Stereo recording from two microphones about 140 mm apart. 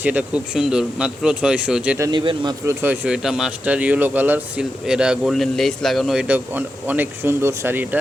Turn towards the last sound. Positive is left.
turn(degrees=-15)  # may be behind; listen again after turning